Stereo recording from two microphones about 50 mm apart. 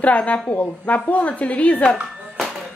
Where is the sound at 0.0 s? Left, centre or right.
Left.